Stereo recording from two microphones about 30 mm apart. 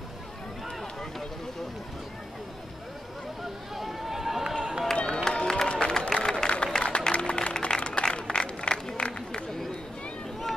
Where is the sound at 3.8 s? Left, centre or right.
Centre.